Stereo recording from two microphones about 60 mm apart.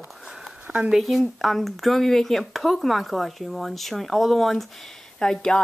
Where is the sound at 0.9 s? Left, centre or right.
Centre.